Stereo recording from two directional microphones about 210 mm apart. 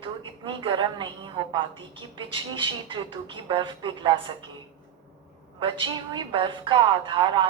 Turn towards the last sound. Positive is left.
turn(degrees=-20)  # may be behind; listen again after turning